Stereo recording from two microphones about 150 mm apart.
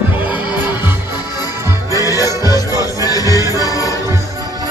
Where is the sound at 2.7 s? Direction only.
20° right (ahead or behind).